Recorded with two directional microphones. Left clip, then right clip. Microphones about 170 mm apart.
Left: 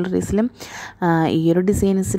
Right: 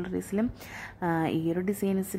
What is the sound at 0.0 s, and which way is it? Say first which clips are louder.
Speech: left 10 dB; 35° left (ahead or behind).